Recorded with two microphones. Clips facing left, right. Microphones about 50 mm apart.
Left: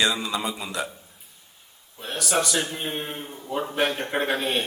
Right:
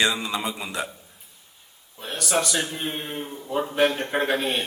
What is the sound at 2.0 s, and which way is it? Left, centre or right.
A man's voice, centre.